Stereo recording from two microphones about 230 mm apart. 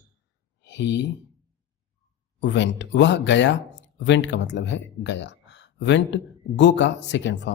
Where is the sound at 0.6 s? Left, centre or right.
Left.